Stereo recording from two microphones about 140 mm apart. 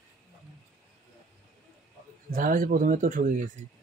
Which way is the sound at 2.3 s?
80° right.